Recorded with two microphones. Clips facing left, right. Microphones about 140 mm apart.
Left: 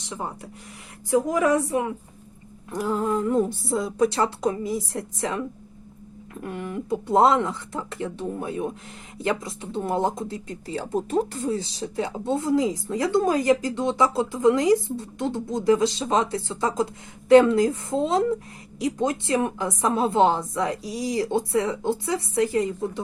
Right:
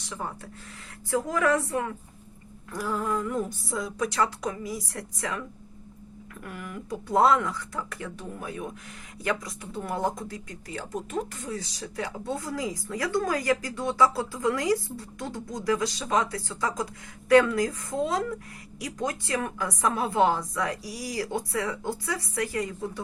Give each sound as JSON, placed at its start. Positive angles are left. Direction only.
{"t": 0.0, "sound": "a woman's voice", "side_deg": 20}